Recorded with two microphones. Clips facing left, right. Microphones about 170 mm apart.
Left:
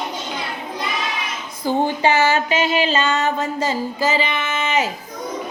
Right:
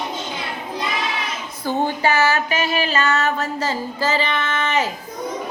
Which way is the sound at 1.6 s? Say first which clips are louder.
Left 2 dB; 20° left (ahead or behind).